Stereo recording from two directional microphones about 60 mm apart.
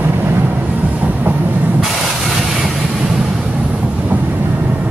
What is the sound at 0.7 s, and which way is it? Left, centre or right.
Train, right.